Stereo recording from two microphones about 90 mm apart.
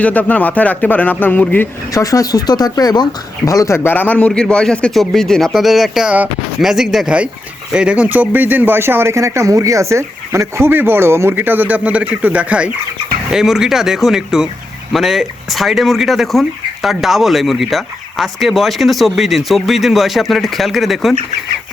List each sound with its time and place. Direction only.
0.0 s speech: 20° left (ahead or behind)
1.9 s speech: 40° left (ahead or behind)
3.8 s speech: 20° left (ahead or behind); by 21.2 s centre (ahead or behind)